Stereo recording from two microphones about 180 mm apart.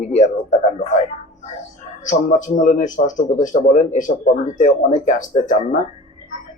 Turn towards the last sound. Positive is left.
turn(degrees=40)  # may be behind; listen again after turning